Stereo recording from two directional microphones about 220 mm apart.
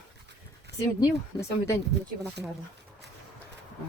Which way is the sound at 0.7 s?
50° right (ahead or behind).